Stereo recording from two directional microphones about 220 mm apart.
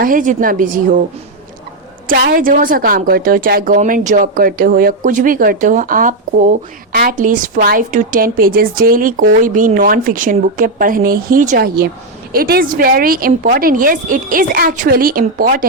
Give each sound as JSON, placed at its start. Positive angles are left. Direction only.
{"t": 0.0, "sound": "a woman's voice", "side_deg": -40}
{"t": 2.0, "sound": "a woman's voice", "side_deg": -40}